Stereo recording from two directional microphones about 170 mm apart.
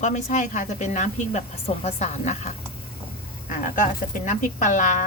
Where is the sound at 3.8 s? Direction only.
50° left (ahead or behind).